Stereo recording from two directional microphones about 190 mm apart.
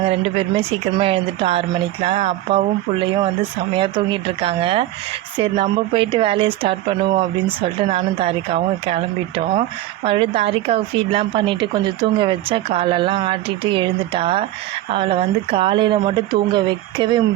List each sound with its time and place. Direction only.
0.0 s speech: 30° right (ahead or behind)